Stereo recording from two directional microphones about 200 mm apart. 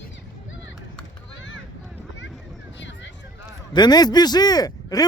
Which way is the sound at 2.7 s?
65° left (ahead or behind).